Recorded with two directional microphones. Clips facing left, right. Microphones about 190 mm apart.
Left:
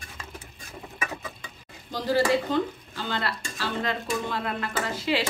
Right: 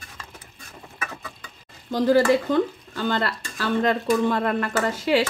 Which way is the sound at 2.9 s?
50° right (ahead or behind).